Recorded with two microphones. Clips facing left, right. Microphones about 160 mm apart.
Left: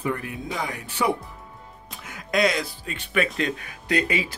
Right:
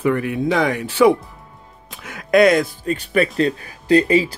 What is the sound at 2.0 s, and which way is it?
Speech, 65° right (ahead or behind).